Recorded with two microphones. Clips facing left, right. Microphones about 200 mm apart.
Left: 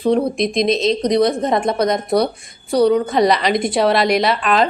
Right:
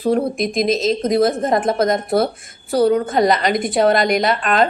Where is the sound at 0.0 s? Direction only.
5° right (ahead or behind).